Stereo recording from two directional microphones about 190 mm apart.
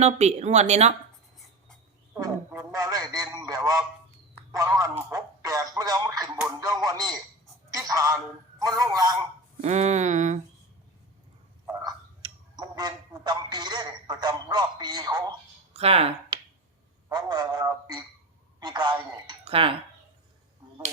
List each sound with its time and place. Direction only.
0.0 s a woman's voice: 35° right (ahead or behind)
2.1 s a sound: 15° right (ahead or behind)
4.5 s a man's voice: 15° right (ahead or behind)
9.6 s a woman's voice: 35° right (ahead or behind)
11.6 s a sound: 15° right (ahead or behind)
15.7 s a woman's voice: 30° right (ahead or behind)